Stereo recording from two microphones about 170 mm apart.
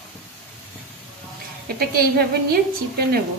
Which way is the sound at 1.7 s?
65° right (ahead or behind).